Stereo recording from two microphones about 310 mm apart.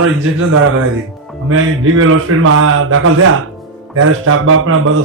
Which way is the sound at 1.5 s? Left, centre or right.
Right.